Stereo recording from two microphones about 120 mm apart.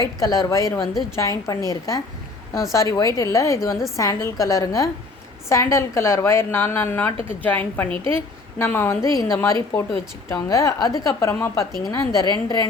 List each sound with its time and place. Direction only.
0.0 s a woman's voice: 30° left (ahead or behind)